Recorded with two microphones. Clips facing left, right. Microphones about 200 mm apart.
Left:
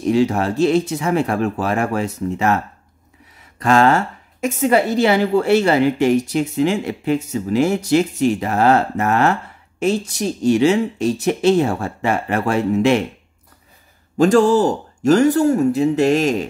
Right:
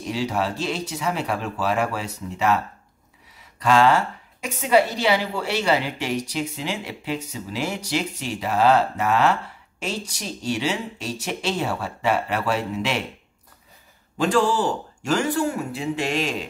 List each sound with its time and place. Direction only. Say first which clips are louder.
0.1 s a woman's voice: left 8 dB; 50° left (ahead or behind)
14.1 s a woman's voice: left 8 dB; 45° left (ahead or behind)